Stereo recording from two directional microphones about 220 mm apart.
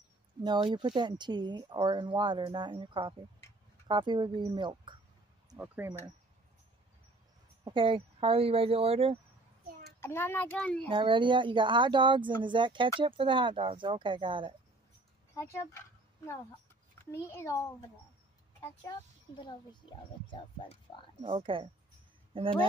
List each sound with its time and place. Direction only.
0.4 s speech: 20° right (ahead or behind)
7.6 s speech: 20° right (ahead or behind)
9.9 s a child's voice: 10° left (ahead or behind)
10.9 s speech: 20° right (ahead or behind)
15.3 s a child's voice: 15° left (ahead or behind)
17.0 s a child's voice: 10° left (ahead or behind)
19.4 s speech: 20° left (ahead or behind)
21.2 s speech: 25° right (ahead or behind)